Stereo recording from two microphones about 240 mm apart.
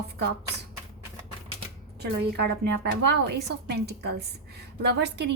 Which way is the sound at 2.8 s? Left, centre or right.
Right.